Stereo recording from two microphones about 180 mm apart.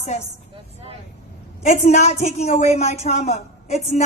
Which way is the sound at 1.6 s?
40° left (ahead or behind).